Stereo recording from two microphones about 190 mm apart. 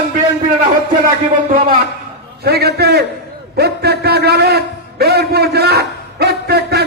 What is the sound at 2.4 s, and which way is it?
A man's voice, 60° right (ahead or behind).